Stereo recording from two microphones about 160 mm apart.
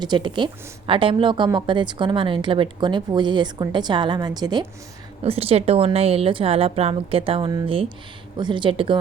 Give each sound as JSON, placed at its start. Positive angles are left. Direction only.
{"t": 0.0, "sound": "speech", "side_deg": -25}
{"t": 5.2, "sound": "a woman's voice", "side_deg": -40}